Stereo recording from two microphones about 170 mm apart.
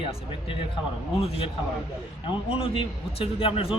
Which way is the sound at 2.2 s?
35° left (ahead or behind).